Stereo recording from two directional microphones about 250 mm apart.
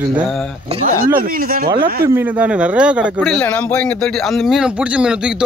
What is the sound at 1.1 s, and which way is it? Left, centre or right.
Speech, right.